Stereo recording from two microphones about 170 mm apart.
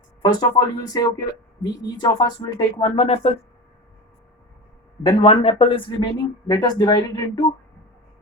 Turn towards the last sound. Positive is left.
turn(degrees=25)  # may be behind; listen again after turning